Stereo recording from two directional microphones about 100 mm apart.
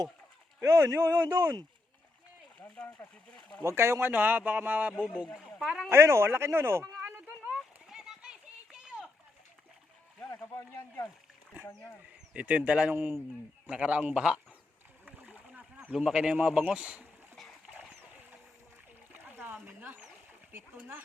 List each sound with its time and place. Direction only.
0.6 s speech: 30° right (ahead or behind)
2.6 s speech: 10° left (ahead or behind)
3.6 s speech: 25° right (ahead or behind); by 5.3 s 10° right (ahead or behind)
5.5 s speech: centre (ahead or behind)
5.9 s speech: 25° right (ahead or behind)
7.5 s a sound: 5° right (ahead or behind)
10.7 s speech: 20° left (ahead or behind)
12.3 s speech: 15° right (ahead or behind)
15.2 s splash: 20° right (ahead or behind)
15.9 s speech: 5° right (ahead or behind)
17.8 s splash: 15° right (ahead or behind)
20.5 s speech: 25° right (ahead or behind)